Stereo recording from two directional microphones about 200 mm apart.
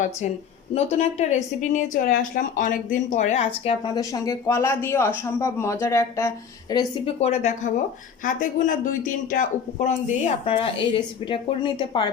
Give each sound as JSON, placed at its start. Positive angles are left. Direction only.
{"t": 0.7, "sound": "speech", "side_deg": 35}
{"t": 4.0, "sound": "speech", "side_deg": 15}
{"t": 7.2, "sound": "speech", "side_deg": 35}